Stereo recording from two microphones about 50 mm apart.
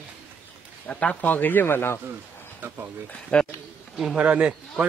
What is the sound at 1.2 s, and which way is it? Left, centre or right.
Speech, left.